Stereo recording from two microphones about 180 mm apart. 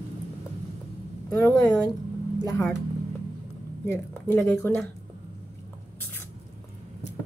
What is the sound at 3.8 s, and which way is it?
Speech, 15° left (ahead or behind).